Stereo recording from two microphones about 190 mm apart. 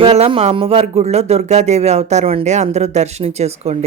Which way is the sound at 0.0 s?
30° right (ahead or behind).